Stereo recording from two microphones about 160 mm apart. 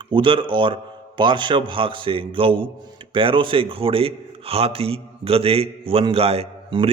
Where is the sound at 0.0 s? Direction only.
30° right (ahead or behind).